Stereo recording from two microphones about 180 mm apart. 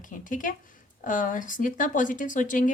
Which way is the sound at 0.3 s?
45° left (ahead or behind).